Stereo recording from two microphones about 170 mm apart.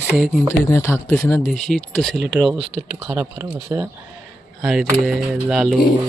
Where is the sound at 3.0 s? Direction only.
15° right (ahead or behind).